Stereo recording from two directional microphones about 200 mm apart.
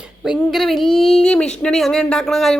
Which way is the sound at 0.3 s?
Centre (ahead or behind).